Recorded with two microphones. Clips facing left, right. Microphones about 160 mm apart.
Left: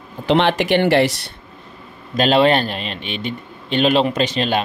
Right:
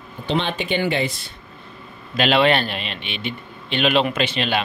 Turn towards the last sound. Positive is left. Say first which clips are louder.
# left 3 dB
turn(degrees=40)  # may be behind; listen again after turning